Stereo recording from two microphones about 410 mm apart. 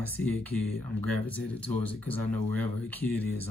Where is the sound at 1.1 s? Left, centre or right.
Centre.